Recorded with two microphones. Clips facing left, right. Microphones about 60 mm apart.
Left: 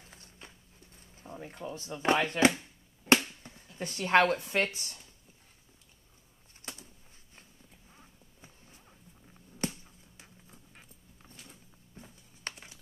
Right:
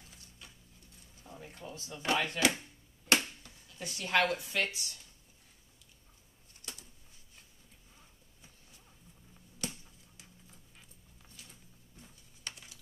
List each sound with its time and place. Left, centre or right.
0.0 s a sound: left
0.9 s speech: left
3.1 s finger snapping: left
3.4 s speech: left
6.6 s bird: left
7.9 s horse: left
9.6 s a sound: left
12.4 s computer keyboard: left